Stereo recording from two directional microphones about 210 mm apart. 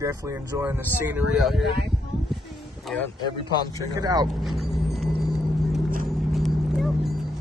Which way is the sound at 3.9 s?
20° right (ahead or behind).